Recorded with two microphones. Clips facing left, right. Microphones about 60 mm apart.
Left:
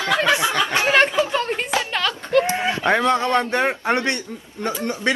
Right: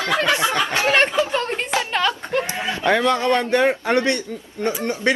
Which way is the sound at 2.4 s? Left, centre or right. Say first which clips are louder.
Left 2 dB; left.